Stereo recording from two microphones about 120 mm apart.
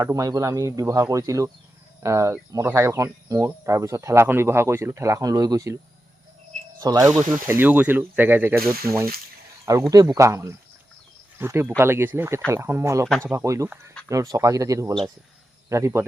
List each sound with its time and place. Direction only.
0.0 s speech: 30° right (ahead or behind)
9.9 s speech: 30° right (ahead or behind)